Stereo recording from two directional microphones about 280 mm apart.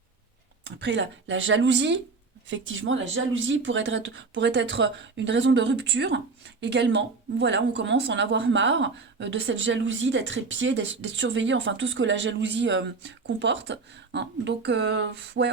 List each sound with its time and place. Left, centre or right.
0.8 s speech: right